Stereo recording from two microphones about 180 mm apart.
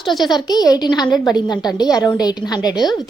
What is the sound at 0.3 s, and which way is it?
A woman's voice, 20° left (ahead or behind).